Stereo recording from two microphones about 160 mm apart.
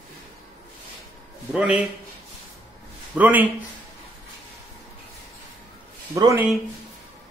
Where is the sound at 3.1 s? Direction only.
10° right (ahead or behind).